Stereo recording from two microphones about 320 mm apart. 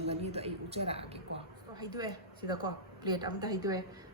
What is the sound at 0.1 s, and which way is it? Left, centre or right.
A woman's voice, centre.